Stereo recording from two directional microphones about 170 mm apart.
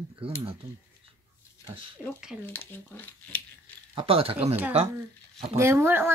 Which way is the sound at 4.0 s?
35° right (ahead or behind).